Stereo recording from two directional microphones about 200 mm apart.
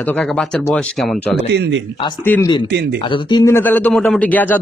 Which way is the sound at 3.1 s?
20° left (ahead or behind).